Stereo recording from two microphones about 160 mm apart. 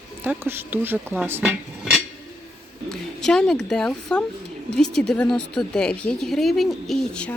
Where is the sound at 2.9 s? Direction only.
5° left (ahead or behind).